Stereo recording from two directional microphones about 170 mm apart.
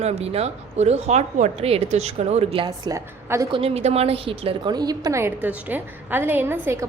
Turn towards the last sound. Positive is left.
turn(degrees=-15)  # may be behind; listen again after turning